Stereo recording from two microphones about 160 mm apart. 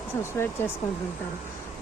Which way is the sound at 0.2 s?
15° left (ahead or behind).